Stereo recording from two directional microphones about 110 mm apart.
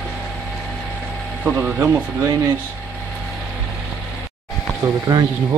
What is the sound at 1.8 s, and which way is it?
Speech, 25° right (ahead or behind).